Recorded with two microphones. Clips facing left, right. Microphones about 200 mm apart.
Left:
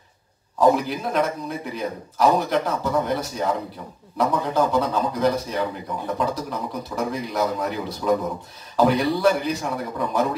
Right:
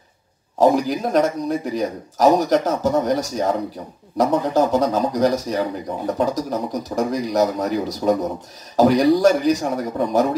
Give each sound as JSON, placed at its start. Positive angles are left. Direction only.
{"t": 0.6, "sound": "speech", "side_deg": -40}